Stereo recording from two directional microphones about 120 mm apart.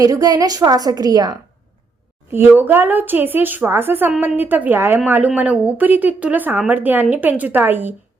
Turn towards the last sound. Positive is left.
turn(degrees=-15)  # may be behind; listen again after turning